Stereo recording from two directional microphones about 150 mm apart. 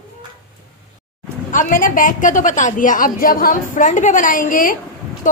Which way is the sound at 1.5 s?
65° left (ahead or behind).